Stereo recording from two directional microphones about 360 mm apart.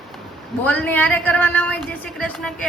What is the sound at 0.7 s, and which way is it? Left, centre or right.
Speech, centre.